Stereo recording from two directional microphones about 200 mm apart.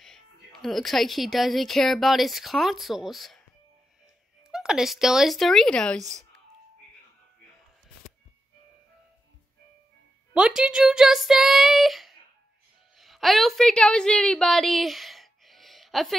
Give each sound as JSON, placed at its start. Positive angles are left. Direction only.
{"t": 0.0, "sound": "speech", "side_deg": 0}
{"t": 10.3, "sound": "a woman's voice", "side_deg": -5}